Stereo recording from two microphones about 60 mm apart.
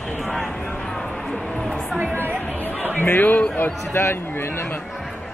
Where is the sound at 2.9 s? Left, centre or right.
Left.